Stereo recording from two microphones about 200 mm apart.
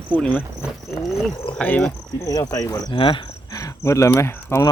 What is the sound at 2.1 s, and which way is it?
Speech, 20° left (ahead or behind).